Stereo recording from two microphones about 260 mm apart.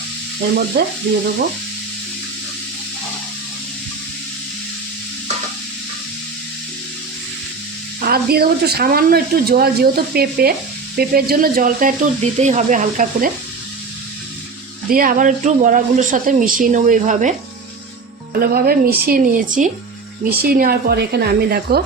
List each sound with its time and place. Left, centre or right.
0.7 s speech: right
8.0 s speech: right
14.8 s speech: right
18.3 s speech: right